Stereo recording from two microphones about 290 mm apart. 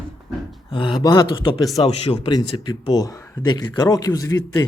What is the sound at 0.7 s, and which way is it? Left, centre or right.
Speech, centre.